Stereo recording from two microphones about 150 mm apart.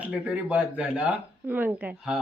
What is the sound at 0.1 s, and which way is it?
Speech, 10° right (ahead or behind).